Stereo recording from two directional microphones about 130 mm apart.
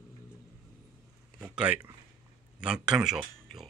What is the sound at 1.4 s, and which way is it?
Speech, 5° right (ahead or behind).